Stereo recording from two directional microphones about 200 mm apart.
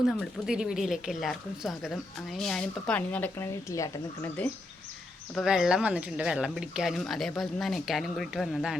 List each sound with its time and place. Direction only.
0.2 s speech: 5° right (ahead or behind)